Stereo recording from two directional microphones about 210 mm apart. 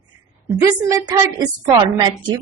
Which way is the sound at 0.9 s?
15° right (ahead or behind).